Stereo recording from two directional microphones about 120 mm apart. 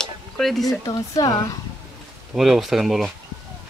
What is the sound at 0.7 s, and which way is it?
Speech, 30° left (ahead or behind).